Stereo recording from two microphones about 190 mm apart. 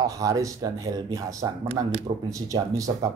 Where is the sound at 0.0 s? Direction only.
20° right (ahead or behind).